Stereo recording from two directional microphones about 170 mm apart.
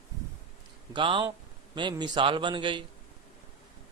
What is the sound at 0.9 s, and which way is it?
Speech, 30° right (ahead or behind).